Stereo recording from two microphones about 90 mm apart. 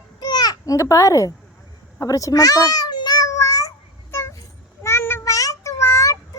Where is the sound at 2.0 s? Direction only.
40° left (ahead or behind).